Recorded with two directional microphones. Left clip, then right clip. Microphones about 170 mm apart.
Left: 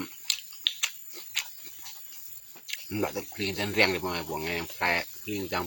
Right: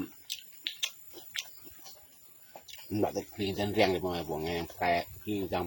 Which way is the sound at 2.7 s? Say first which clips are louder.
Left 1 dB; 10° right (ahead or behind).